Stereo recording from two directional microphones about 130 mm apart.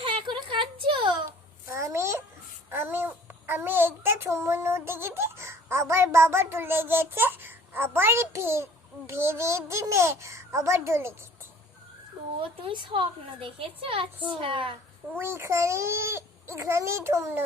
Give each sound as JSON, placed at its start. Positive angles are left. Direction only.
{"t": 0.0, "sound": "a sound", "side_deg": -40}
{"t": 1.7, "sound": "a sound", "side_deg": -20}
{"t": 2.6, "sound": "child singing", "side_deg": -15}
{"t": 9.0, "sound": "babbling", "side_deg": -20}
{"t": 12.4, "sound": "a child's voice", "side_deg": -45}
{"t": 15.2, "sound": "a child's voice", "side_deg": -20}